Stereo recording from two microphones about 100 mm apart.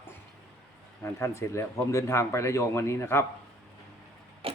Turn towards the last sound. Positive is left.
turn(degrees=-70)  # may be behind; listen again after turning